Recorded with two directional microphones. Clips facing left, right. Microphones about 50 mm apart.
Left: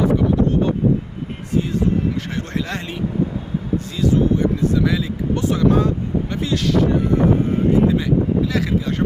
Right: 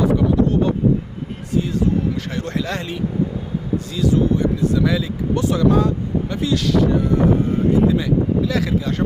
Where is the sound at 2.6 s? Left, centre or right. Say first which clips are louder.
Right 1 dB; left.